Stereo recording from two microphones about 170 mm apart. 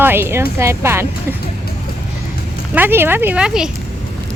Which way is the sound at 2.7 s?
10° right (ahead or behind).